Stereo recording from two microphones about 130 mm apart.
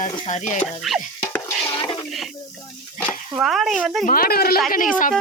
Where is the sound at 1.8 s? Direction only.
35° left (ahead or behind).